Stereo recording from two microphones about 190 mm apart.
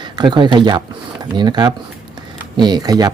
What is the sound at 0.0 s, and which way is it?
Speech, 25° right (ahead or behind).